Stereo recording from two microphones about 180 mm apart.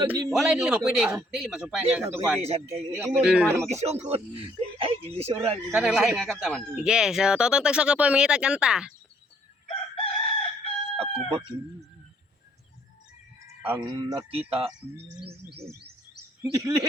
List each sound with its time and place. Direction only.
0.3 s speech: centre (ahead or behind)
2.4 s speech: 35° right (ahead or behind)
3.0 s speech: 5° right (ahead or behind)
3.7 s speech: 35° right (ahead or behind)
5.7 s speech: 5° right (ahead or behind)
9.6 s chicken: 30° left (ahead or behind)
10.9 s chicken: 35° right (ahead or behind)
13.6 s speech: 15° right (ahead or behind)
14.3 s speech: 30° right (ahead or behind)
16.4 s speech: 20° right (ahead or behind)